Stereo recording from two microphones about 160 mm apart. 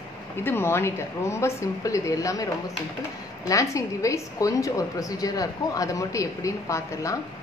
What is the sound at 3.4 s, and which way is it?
A woman's voice, 20° left (ahead or behind).